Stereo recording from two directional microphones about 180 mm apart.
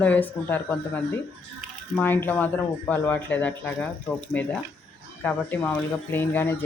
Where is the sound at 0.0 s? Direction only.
10° left (ahead or behind).